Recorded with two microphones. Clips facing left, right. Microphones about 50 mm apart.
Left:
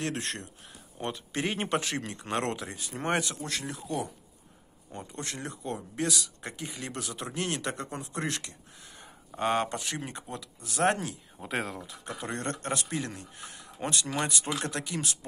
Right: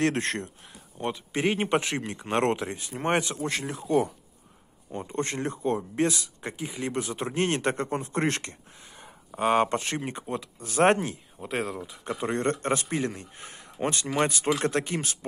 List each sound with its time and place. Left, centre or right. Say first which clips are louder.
0.0 s a man's voice: right 8 dB; right
0.9 s speech: right 4 dB; centre
1.3 s speech: right 5 dB; right
2.3 s a man's voice: right 6 dB; right
4.9 s a man's voice: right 8 dB; right
9.0 s a sound: right 4 dB; centre
9.7 s a man's voice: right 6 dB; right
11.3 s speech: right 2 dB; centre
12.0 s speech: right 8 dB; right
13.4 s a sound: right 1 dB; right
13.7 s a man's voice: right 5 dB; right